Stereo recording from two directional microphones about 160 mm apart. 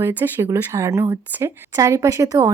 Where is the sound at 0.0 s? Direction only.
15° right (ahead or behind).